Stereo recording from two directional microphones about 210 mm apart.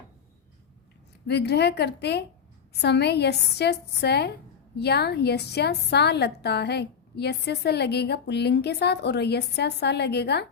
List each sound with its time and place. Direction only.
1.3 s a woman's voice: 50° left (ahead or behind)